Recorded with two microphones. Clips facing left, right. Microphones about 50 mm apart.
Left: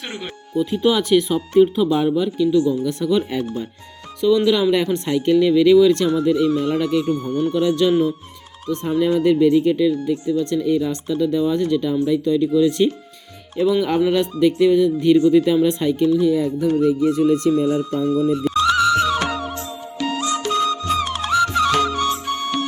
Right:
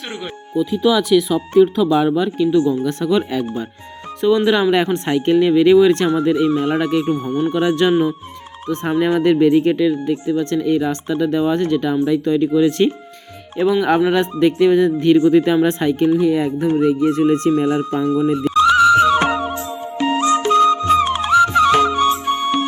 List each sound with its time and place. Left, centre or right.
1.7 s speech: right
2.1 s speech: right
2.5 s speech: right
2.8 s speech: right
4.2 s speech: right
7.5 s speech: right
10.1 s speech: right
13.6 s speech: right
16.6 s speech: right
18.6 s music: centre